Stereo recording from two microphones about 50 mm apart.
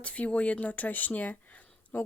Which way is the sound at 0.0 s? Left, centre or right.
Left.